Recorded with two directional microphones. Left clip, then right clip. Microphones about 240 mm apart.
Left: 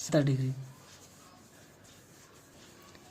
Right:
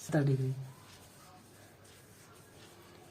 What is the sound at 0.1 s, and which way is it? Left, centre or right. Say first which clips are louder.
Speech: left 4 dB; left.